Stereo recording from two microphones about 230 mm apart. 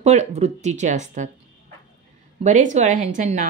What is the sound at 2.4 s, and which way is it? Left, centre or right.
Speech, right.